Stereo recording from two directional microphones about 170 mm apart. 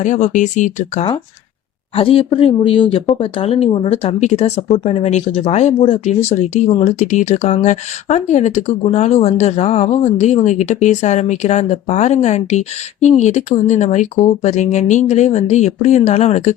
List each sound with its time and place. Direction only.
0.0 s speech: 45° left (ahead or behind)
2.0 s speech: 30° left (ahead or behind)